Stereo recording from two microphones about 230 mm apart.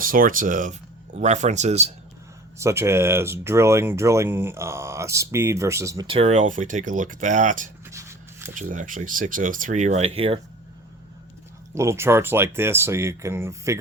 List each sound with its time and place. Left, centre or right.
0.0 s speech: right
2.6 s speech: centre; by 7.7 s right
7.9 s shuffle: centre
8.5 s speech: right
11.7 s speech: centre